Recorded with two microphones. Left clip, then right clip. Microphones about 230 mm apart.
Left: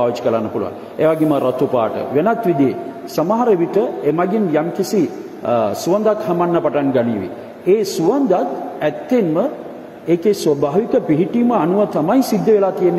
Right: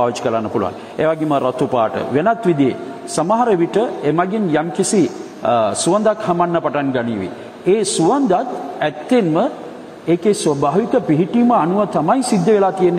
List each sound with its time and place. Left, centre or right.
0.0 s a man's voice: right